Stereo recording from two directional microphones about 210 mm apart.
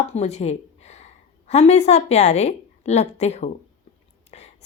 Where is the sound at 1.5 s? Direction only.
30° left (ahead or behind).